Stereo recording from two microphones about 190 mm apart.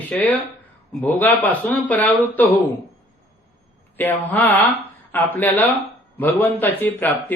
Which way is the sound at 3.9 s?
10° left (ahead or behind).